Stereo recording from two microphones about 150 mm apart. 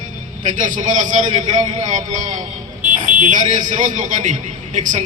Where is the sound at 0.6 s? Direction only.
60° right (ahead or behind).